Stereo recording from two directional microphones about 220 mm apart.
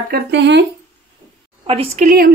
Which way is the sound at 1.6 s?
25° right (ahead or behind).